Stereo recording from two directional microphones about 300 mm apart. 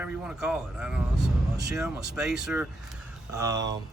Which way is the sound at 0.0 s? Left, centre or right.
Centre.